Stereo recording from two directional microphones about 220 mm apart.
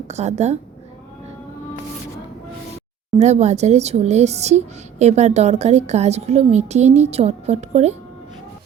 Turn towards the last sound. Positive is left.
turn(degrees=-30)  # may be behind; listen again after turning